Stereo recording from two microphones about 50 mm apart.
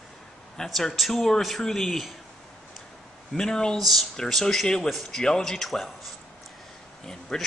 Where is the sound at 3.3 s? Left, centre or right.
Centre.